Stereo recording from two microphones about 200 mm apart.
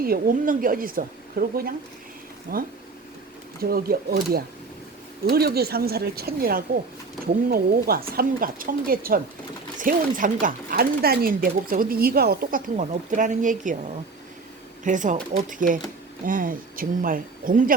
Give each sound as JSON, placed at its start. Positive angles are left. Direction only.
{"t": 0.0, "sound": "speech", "side_deg": -45}
{"t": 14.8, "sound": "speech", "side_deg": -40}